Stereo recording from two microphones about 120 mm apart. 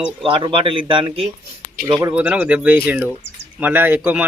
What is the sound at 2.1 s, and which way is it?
Speech, 10° right (ahead or behind).